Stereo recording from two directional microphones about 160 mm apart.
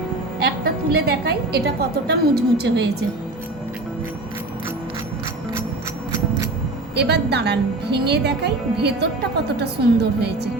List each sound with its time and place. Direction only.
0.4 s a woman's voice: 85° right
6.9 s a woman's voice: 90° right